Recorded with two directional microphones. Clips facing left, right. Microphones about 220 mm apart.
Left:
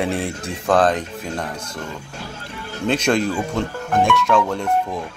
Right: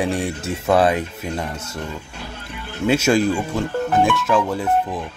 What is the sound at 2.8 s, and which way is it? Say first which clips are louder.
Speech: right 2 dB; 5° right (ahead or behind).